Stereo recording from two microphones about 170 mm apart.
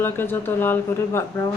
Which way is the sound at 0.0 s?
15° left (ahead or behind).